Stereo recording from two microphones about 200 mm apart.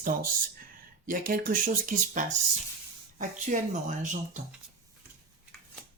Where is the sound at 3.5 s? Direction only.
40° right (ahead or behind).